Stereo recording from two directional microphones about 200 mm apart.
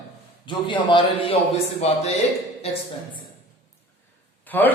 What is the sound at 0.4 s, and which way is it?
Speech, 25° left (ahead or behind).